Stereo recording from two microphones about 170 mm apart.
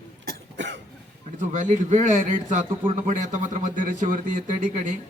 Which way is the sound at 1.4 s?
45° right (ahead or behind).